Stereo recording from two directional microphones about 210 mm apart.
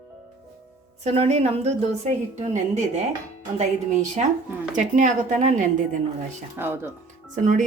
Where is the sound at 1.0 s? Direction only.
30° right (ahead or behind).